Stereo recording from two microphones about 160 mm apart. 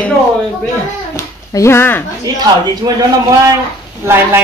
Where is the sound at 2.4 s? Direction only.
25° right (ahead or behind).